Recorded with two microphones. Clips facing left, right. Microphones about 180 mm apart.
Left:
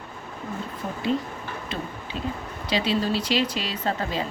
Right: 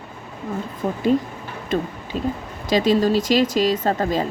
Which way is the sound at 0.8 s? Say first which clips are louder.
Right 10 dB; 50° right (ahead or behind).